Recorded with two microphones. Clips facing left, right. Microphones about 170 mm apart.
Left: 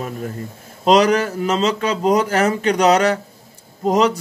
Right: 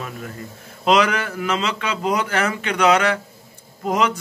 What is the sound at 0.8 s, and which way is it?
Speech, 40° left (ahead or behind).